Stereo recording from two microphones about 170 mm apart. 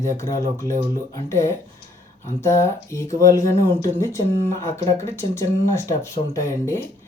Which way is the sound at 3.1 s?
20° left (ahead or behind).